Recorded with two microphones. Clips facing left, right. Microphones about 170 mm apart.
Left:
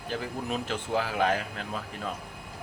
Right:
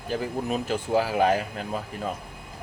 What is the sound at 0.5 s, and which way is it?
Speech, 10° right (ahead or behind).